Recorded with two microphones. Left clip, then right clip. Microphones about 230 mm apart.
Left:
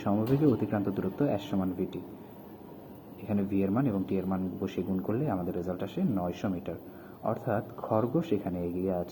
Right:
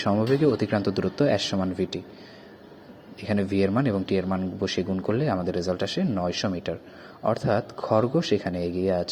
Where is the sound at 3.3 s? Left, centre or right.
Right.